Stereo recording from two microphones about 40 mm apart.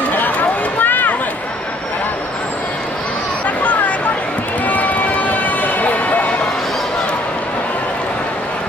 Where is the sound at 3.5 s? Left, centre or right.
Left.